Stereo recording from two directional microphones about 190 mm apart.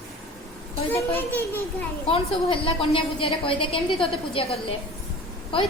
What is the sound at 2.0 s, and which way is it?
A woman's voice, 30° left (ahead or behind).